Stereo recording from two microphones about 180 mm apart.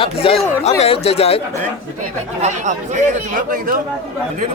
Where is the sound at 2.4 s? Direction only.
40° right (ahead or behind).